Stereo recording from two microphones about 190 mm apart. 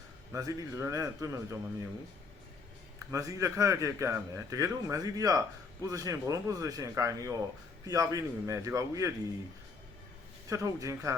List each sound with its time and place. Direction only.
0.3 s speech: 15° right (ahead or behind)
3.1 s speech: 15° right (ahead or behind)
10.5 s speech: 20° right (ahead or behind)